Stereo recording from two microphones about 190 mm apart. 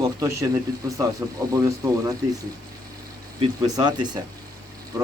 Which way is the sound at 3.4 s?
20° right (ahead or behind).